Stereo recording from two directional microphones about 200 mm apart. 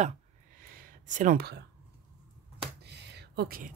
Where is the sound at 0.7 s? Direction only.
40° right (ahead or behind).